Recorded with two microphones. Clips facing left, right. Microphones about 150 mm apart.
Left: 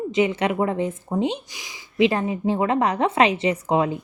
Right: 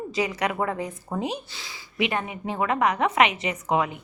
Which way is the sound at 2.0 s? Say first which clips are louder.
Left 7 dB; 30° left (ahead or behind).